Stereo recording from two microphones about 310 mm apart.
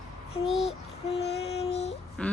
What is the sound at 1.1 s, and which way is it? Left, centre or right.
Music, centre.